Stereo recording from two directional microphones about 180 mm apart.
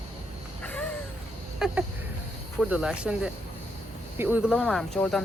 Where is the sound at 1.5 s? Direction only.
5° right (ahead or behind).